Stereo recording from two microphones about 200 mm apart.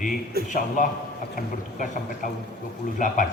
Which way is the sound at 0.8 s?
40° left (ahead or behind).